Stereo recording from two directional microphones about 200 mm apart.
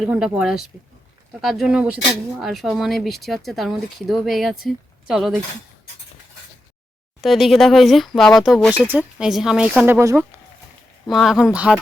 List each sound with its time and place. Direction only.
0.0 s speech: 5° right (ahead or behind)
7.2 s speech: centre (ahead or behind)
11.0 s speech: centre (ahead or behind)